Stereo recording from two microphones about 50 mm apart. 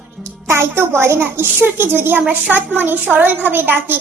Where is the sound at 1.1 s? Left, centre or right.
Right.